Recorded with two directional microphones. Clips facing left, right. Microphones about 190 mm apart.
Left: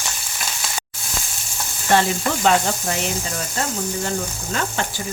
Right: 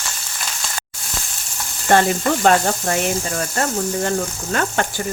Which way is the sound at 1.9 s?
50° right (ahead or behind).